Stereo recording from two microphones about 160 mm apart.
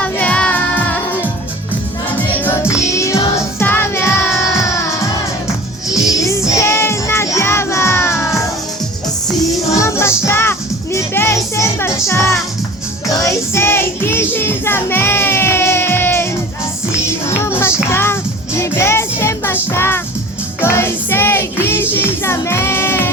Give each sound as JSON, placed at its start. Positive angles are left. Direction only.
{"t": 0.0, "sound": "music", "side_deg": 10}
{"t": 6.0, "sound": "music", "side_deg": 20}
{"t": 9.5, "sound": "music", "side_deg": 20}
{"t": 17.2, "sound": "music", "side_deg": 15}